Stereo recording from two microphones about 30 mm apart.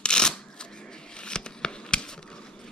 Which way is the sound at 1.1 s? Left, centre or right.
Left.